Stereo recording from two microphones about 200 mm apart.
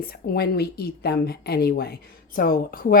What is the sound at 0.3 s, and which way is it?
A woman's voice, 50° left (ahead or behind).